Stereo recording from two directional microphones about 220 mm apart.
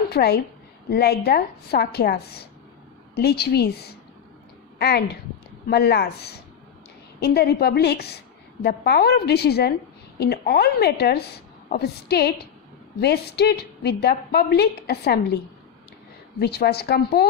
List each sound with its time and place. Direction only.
0.1 s a woman's voice: 45° left (ahead or behind)
16.3 s a woman's voice: 45° left (ahead or behind)